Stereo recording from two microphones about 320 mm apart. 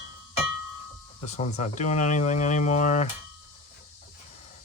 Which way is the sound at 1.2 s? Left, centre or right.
Left.